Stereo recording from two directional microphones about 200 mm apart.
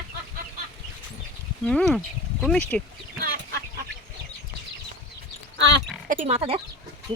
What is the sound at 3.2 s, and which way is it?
Chicken, 50° right (ahead or behind).